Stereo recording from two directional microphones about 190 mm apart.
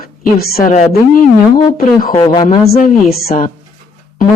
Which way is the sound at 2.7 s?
45° left (ahead or behind).